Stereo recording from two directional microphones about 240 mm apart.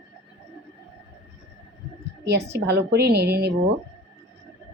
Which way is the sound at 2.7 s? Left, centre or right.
Right.